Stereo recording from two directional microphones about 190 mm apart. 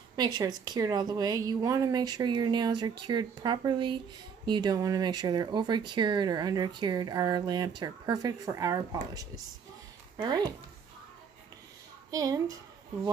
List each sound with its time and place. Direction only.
0.1 s speech: 20° right (ahead or behind)
10.1 s speech: 20° right (ahead or behind)
12.1 s speech: 20° right (ahead or behind)